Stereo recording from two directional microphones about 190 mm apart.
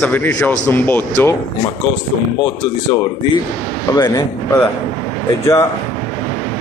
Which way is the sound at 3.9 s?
20° left (ahead or behind).